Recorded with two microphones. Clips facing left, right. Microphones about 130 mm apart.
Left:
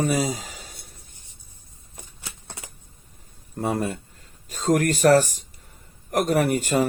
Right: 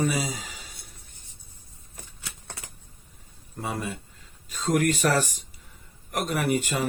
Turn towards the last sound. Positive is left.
turn(degrees=45)  # may be behind; listen again after turning